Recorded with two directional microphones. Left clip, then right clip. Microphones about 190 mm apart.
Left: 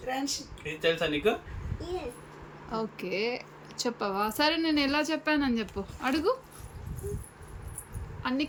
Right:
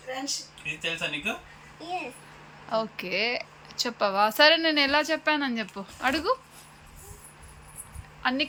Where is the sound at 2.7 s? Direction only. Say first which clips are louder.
Right 5 dB; 5° left (ahead or behind).